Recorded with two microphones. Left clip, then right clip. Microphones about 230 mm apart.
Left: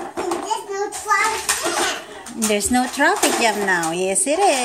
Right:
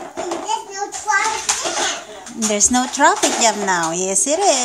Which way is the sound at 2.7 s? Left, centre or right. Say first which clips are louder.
Right 3 dB; centre.